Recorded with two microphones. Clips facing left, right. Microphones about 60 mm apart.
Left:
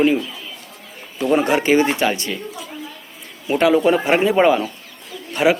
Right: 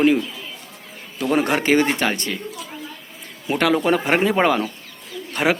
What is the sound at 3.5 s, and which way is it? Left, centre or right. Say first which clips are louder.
A man's voice: left 3 dB; right.